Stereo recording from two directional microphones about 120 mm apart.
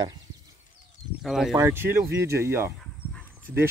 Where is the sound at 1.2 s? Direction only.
Centre (ahead or behind).